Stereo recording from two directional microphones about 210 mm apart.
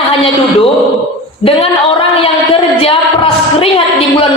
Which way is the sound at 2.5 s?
25° left (ahead or behind).